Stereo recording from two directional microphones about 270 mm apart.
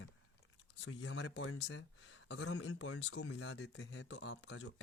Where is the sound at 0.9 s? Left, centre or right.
Left.